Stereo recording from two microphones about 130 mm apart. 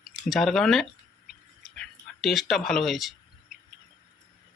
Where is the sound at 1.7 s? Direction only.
5° left (ahead or behind).